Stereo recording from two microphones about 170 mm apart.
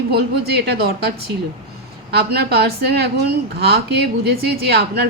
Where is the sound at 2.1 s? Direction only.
70° right (ahead or behind).